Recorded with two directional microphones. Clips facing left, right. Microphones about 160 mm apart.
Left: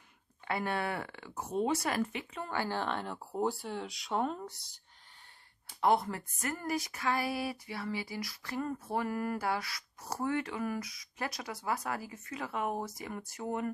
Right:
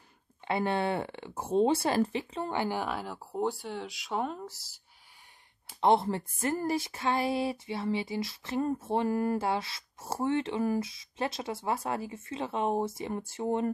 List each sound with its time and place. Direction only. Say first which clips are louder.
0.5 s speech: right 5 dB; 25° right (ahead or behind)
2.6 s speech: right 2 dB; 10° right (ahead or behind)
5.8 s speech: right 4 dB; 25° right (ahead or behind)